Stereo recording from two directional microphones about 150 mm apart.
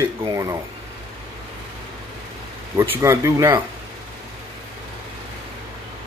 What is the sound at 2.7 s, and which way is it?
Speech, 20° right (ahead or behind).